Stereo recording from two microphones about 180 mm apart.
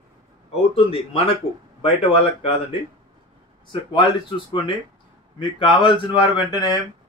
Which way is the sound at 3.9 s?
25° left (ahead or behind).